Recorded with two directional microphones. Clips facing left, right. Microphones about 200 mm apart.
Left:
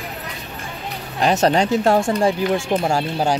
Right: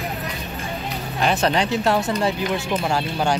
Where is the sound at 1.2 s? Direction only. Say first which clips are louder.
Left 4 dB; 40° left (ahead or behind).